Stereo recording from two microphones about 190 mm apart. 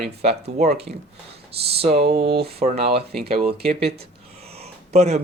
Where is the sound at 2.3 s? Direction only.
55° right (ahead or behind).